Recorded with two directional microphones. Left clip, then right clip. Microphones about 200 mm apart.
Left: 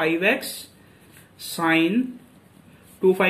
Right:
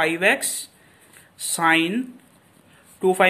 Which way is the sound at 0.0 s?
50° right (ahead or behind).